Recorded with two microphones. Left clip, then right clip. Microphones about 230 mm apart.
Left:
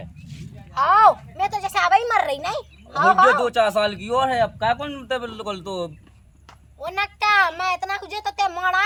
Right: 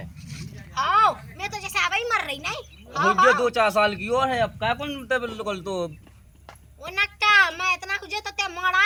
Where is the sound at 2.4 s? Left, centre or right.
Centre.